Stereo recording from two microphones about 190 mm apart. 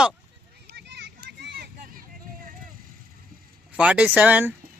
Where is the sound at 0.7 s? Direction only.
60° right (ahead or behind).